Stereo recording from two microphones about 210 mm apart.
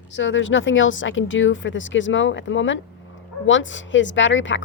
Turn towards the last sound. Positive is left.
turn(degrees=60)  # may be behind; listen again after turning